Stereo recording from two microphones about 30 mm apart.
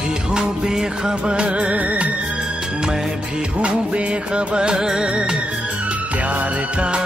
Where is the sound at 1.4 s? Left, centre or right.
Right.